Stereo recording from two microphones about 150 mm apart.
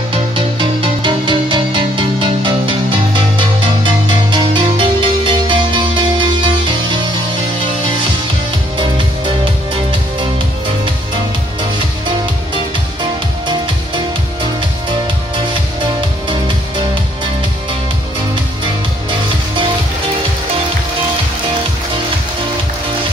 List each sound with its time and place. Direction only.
0.4 s music: 35° right (ahead or behind)
8.7 s music: 35° right (ahead or behind)
13.5 s music: 30° right (ahead or behind)
19.0 s music: 35° right (ahead or behind)